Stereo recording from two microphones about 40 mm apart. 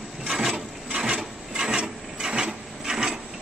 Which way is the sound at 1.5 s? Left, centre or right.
Centre.